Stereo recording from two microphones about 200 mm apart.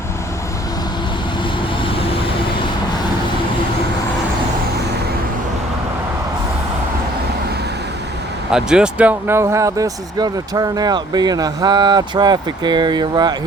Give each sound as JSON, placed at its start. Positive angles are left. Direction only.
{"t": 8.4, "sound": "speech", "side_deg": -5}